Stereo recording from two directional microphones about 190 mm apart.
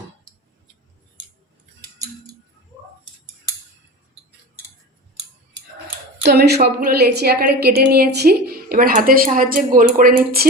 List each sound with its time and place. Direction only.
6.2 s a woman's voice: 60° right (ahead or behind)